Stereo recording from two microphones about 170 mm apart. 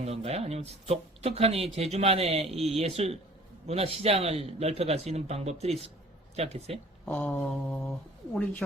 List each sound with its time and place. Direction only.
0.0 s speech: 35° right (ahead or behind)
7.0 s speech: 10° left (ahead or behind)